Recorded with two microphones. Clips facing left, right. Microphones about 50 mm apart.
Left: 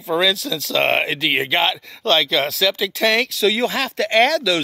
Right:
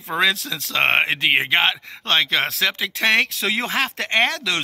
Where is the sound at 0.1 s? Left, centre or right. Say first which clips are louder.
Left 2 dB; right.